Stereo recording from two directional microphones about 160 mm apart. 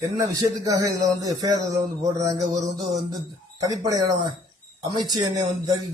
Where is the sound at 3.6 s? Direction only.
20° right (ahead or behind).